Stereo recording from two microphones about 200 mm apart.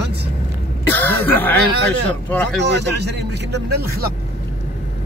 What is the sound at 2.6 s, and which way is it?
A man's voice, 60° right (ahead or behind).